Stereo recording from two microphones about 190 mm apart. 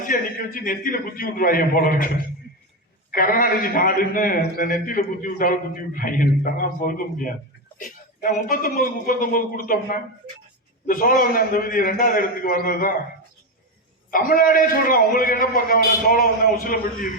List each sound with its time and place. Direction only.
0.0 s a man's voice: 45° left (ahead or behind)
3.1 s a man's voice: 50° left (ahead or behind)
14.1 s a man's voice: 45° left (ahead or behind)